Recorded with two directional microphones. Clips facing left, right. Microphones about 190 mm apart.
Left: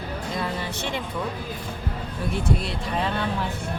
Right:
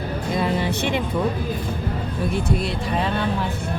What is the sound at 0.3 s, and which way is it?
Music, 20° right (ahead or behind).